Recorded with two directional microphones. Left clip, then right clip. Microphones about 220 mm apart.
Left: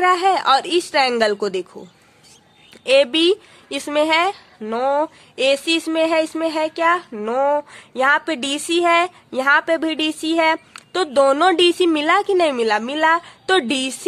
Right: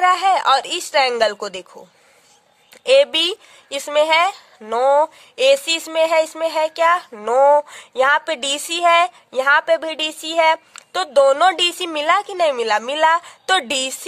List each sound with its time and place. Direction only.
0.0 s speech: 30° right (ahead or behind)